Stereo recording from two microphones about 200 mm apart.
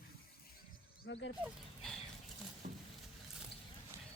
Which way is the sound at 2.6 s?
45° right (ahead or behind).